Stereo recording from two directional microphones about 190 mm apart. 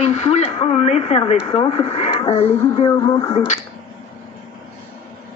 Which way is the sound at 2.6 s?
25° left (ahead or behind).